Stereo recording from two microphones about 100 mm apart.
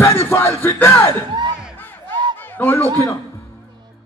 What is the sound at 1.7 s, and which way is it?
Battle cry, 20° left (ahead or behind).